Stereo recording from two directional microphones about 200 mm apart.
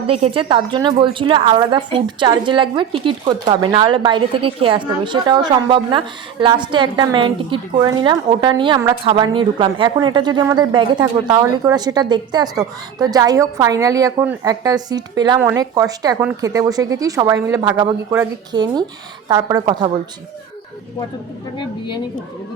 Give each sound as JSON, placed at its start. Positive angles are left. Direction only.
{"t": 0.1, "sound": "a woman's voice", "side_deg": -30}